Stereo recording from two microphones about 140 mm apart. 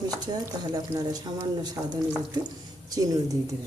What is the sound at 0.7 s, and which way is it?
A woman's voice, 30° right (ahead or behind).